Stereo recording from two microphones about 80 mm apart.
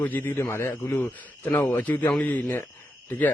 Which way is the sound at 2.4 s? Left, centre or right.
Left.